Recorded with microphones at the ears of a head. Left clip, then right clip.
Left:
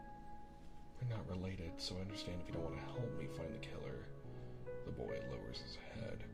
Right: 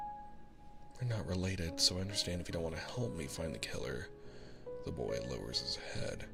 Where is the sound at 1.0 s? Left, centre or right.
Right.